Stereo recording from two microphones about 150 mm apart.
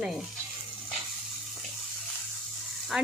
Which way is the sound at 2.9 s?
5° right (ahead or behind).